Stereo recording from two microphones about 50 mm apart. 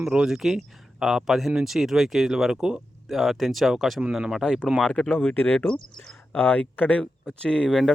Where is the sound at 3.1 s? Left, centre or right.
Centre.